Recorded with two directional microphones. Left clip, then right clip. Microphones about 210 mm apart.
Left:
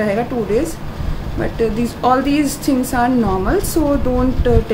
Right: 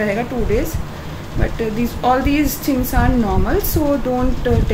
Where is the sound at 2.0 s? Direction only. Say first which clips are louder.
Left 1 dB; 15° left (ahead or behind).